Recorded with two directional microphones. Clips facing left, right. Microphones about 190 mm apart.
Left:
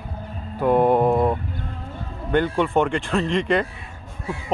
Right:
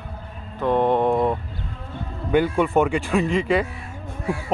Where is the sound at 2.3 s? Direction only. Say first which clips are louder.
Right 1 dB; 10° right (ahead or behind).